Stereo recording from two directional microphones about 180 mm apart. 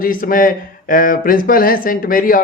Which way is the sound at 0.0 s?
50° left (ahead or behind).